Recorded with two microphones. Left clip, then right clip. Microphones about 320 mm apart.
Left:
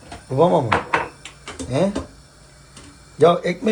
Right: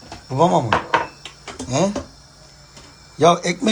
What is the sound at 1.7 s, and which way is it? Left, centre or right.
Speech, centre.